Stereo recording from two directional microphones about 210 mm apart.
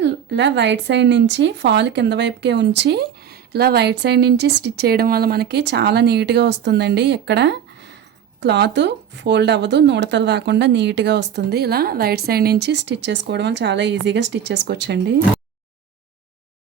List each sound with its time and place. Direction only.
0.0 s speech: 55° right (ahead or behind)